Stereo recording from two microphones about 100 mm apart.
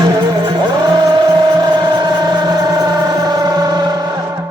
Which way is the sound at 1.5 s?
45° right (ahead or behind).